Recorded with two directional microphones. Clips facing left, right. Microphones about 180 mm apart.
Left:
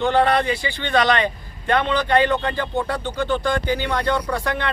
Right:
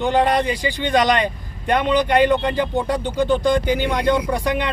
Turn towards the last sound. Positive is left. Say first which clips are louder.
# right 3 dB
turn(degrees=-15)  # may be behind; listen again after turning